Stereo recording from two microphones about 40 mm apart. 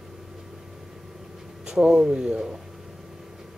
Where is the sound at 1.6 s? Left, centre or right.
Centre.